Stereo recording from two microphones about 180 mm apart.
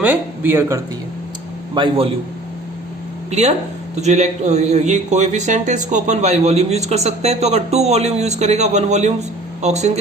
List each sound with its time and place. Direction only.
0.0 s speech: 10° right (ahead or behind)
1.7 s a man's voice: 30° right (ahead or behind)
3.2 s a man's voice: 40° right (ahead or behind)